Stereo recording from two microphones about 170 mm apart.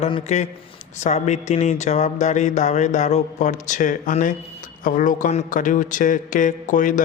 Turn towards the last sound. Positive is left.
turn(degrees=50)  # may be behind; listen again after turning